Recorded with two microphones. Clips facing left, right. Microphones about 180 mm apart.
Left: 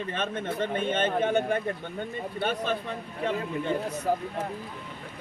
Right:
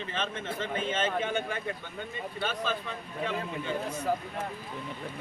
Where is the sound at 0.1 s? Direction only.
55° left (ahead or behind).